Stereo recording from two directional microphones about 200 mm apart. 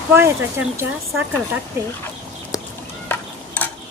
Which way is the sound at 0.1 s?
10° right (ahead or behind).